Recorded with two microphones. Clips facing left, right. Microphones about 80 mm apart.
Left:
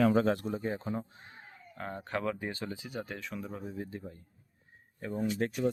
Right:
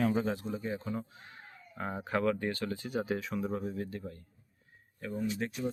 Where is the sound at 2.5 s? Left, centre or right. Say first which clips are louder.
Right 3 dB; centre.